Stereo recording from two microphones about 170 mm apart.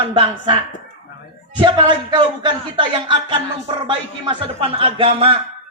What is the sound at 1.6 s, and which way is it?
A man's voice, 30° right (ahead or behind).